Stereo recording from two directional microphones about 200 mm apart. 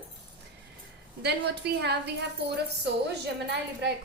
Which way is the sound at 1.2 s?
55° right (ahead or behind).